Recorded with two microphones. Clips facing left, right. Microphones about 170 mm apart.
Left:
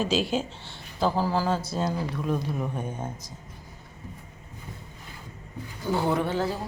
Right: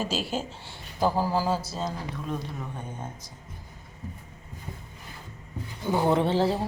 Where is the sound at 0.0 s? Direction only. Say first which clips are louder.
Left 4 dB; 5° right (ahead or behind).